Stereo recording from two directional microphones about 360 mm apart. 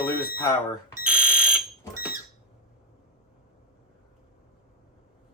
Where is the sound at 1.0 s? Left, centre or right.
Centre.